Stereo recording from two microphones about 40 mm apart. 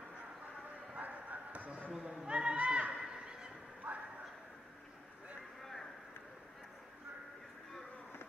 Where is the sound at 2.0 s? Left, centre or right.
Right.